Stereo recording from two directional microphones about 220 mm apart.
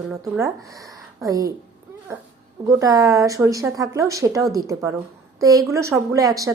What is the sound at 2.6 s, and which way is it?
A woman's voice, 15° right (ahead or behind).